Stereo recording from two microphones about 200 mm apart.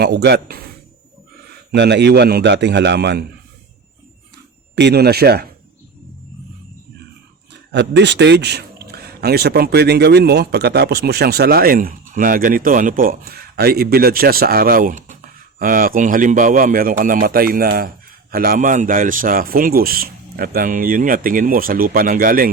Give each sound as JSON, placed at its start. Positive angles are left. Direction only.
{"t": 0.0, "sound": "a man's voice", "side_deg": -55}
{"t": 1.7, "sound": "a man's voice", "side_deg": -60}
{"t": 4.7, "sound": "a man's voice", "side_deg": -60}
{"t": 7.7, "sound": "a man's voice", "side_deg": -60}